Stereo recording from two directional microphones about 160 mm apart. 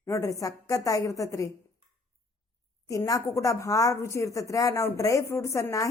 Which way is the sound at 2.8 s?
20° left (ahead or behind).